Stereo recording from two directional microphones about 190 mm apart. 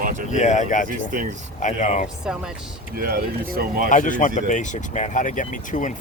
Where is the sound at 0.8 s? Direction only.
45° right (ahead or behind).